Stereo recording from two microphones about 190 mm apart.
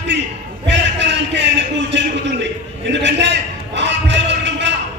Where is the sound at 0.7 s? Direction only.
70° right (ahead or behind).